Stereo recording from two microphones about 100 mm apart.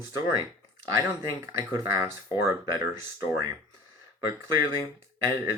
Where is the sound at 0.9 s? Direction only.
35° right (ahead or behind).